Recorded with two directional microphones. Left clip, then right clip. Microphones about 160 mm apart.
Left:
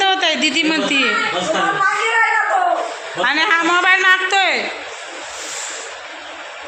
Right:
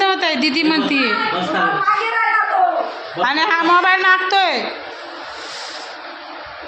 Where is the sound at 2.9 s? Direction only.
Centre (ahead or behind).